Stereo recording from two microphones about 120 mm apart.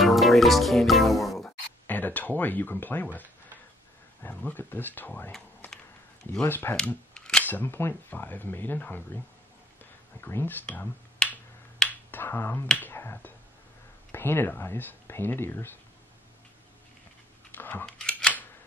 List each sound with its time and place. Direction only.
0.0 s music: centre (ahead or behind)
1.9 s speech: 15° left (ahead or behind)
6.4 s speech: 20° left (ahead or behind)
6.8 s speech: 5° left (ahead or behind)
10.2 s speech: 15° left (ahead or behind)
17.6 s a sound: 15° left (ahead or behind)
17.8 s a sound: 5° left (ahead or behind)